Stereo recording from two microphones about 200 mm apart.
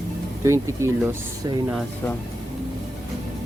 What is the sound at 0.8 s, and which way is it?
Speech, 10° right (ahead or behind).